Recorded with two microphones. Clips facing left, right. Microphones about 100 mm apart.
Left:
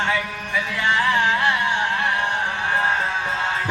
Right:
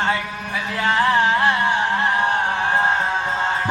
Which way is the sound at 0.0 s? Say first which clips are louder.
Right 1 dB; 35° right (ahead or behind).